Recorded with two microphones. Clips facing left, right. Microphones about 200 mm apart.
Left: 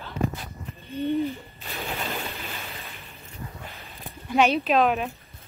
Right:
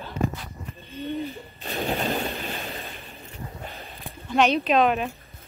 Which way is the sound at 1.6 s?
35° right (ahead or behind).